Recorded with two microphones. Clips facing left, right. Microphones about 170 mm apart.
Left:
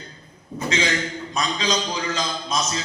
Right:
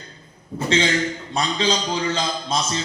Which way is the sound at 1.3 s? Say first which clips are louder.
Right 2 dB; 30° right (ahead or behind).